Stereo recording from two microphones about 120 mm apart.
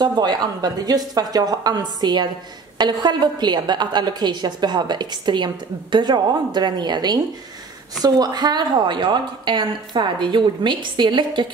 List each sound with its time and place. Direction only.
0.0 s a woman's voice: 35° right (ahead or behind)